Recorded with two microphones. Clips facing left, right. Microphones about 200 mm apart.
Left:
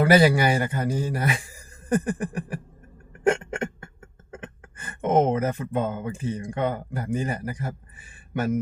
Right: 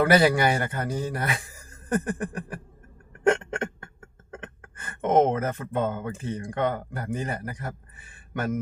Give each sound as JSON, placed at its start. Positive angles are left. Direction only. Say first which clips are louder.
{"t": 0.0, "sound": "speech", "louder": "left 2 dB", "side_deg": 10}
{"t": 3.2, "sound": "a sound", "louder": "even", "side_deg": 10}
{"t": 4.3, "sound": "speech", "louder": "left 1 dB", "side_deg": 10}